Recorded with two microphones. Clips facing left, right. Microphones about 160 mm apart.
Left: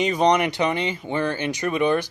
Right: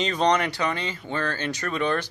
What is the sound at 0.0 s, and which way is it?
Speech, 15° left (ahead or behind).